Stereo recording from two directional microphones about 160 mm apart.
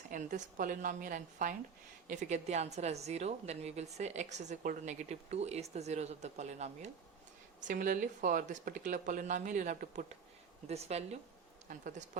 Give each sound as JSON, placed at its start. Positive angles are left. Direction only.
{"t": 0.1, "sound": "a woman's voice", "side_deg": -50}
{"t": 10.7, "sound": "speech", "side_deg": -40}
{"t": 11.7, "sound": "a woman's voice", "side_deg": -55}